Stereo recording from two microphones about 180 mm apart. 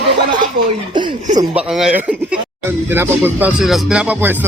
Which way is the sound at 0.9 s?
25° right (ahead or behind).